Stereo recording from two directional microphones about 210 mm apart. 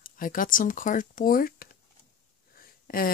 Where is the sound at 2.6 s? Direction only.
45° left (ahead or behind).